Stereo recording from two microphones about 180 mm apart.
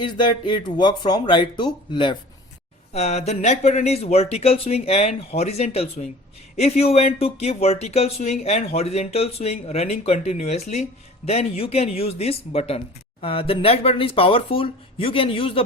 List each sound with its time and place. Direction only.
0.0 s speech: 25° left (ahead or behind)
2.9 s speech: 35° left (ahead or behind)